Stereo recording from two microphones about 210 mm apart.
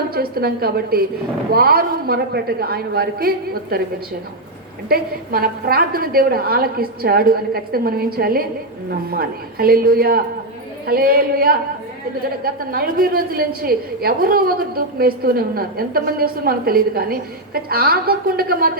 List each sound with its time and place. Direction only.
0.1 s a woman's voice: 45° right (ahead or behind)
4.9 s a woman's voice: 45° right (ahead or behind)